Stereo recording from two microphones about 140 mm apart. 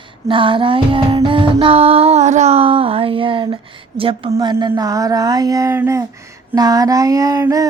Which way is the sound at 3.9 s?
40° right (ahead or behind).